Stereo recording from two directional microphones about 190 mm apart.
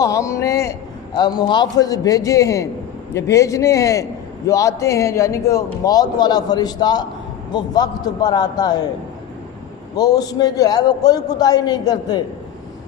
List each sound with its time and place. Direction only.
0.0 s a man's voice: 15° left (ahead or behind)
9.9 s a man's voice: 20° left (ahead or behind)